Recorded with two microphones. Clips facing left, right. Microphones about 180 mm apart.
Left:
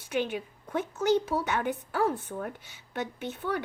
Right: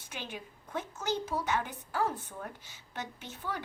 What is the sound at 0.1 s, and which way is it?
A woman's voice, 60° left (ahead or behind).